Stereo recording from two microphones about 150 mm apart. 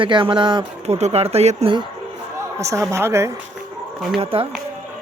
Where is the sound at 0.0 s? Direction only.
35° right (ahead or behind).